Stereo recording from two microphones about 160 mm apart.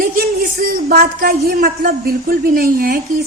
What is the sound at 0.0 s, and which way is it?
A woman's voice, 65° right (ahead or behind).